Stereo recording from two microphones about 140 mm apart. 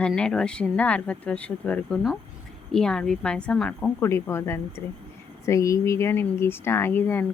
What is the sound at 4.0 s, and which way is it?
Speech, 20° left (ahead or behind).